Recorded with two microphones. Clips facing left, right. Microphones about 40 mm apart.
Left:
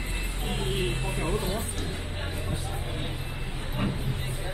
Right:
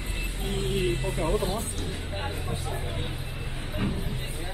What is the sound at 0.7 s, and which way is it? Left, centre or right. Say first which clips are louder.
Vehicle: right 3 dB; left.